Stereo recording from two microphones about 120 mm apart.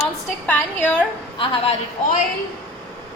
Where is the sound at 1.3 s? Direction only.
45° left (ahead or behind).